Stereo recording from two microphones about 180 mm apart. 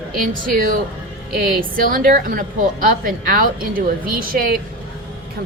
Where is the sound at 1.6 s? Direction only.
50° right (ahead or behind).